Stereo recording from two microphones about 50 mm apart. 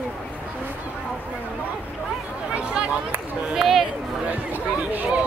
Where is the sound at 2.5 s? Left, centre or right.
Right.